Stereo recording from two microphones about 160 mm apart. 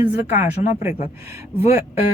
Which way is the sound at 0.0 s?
10° right (ahead or behind).